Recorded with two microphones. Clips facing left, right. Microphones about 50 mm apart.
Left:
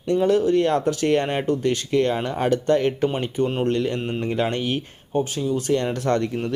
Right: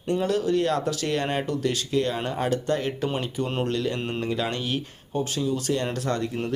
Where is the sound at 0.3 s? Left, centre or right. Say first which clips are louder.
Left 5 dB; left.